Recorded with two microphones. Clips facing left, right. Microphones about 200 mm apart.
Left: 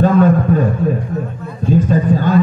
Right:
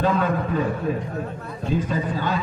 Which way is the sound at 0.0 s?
45° left (ahead or behind).